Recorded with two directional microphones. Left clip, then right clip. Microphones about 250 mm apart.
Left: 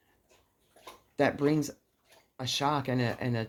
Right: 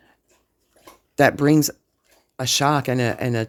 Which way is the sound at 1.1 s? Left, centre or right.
Right.